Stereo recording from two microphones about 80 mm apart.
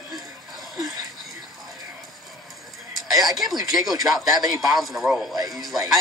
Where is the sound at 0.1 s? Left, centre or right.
Centre.